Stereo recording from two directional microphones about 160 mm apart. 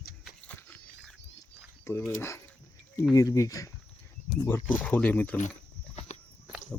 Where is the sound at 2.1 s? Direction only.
15° left (ahead or behind).